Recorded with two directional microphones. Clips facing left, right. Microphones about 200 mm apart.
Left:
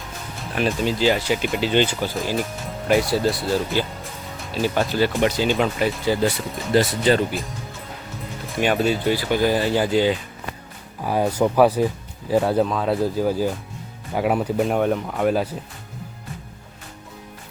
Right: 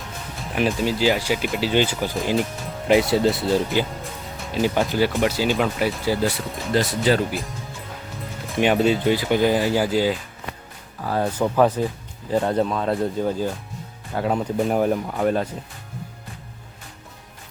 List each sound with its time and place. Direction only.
0.7 s speech: 10° right (ahead or behind)
2.8 s speech: 20° right (ahead or behind); by 7.5 s centre (ahead or behind)
8.6 s speech: 20° right (ahead or behind)
11.0 s speech: 15° left (ahead or behind)